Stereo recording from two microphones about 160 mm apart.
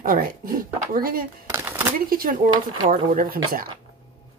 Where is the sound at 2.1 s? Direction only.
65° right (ahead or behind).